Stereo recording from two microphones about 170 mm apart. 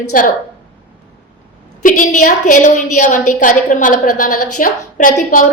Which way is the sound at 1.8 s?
50° left (ahead or behind).